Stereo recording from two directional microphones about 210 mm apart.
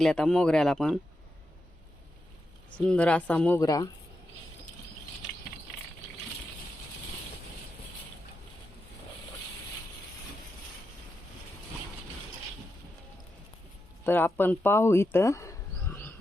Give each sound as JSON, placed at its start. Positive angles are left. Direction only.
{"t": 0.0, "sound": "speech", "side_deg": 5}
{"t": 2.7, "sound": "speech", "side_deg": 5}
{"t": 3.6, "sound": "speech", "side_deg": 15}
{"t": 14.0, "sound": "speech", "side_deg": 10}